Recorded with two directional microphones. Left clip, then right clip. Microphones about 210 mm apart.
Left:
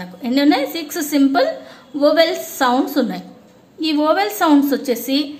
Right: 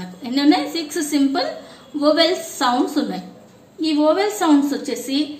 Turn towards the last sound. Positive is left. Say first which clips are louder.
# left 5 dB
turn(degrees=50)  # may be behind; listen again after turning